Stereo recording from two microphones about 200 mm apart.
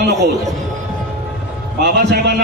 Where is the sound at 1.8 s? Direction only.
55° right (ahead or behind).